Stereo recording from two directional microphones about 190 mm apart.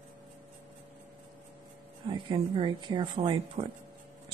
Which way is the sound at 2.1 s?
25° right (ahead or behind).